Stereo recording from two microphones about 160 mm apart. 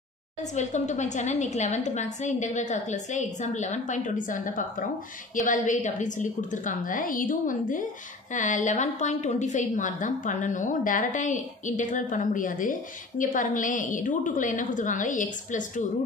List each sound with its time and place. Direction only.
0.4 s a woman's voice: 50° left (ahead or behind)